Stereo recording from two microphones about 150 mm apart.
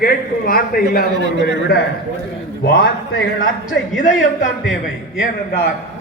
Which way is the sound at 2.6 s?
90° left.